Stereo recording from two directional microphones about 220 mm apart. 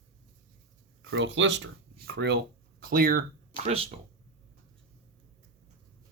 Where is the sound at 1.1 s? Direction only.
60° right (ahead or behind); by 3.2 s 40° right (ahead or behind).